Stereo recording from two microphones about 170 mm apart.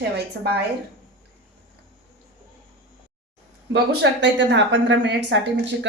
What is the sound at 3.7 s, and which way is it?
A woman's voice, 90° right.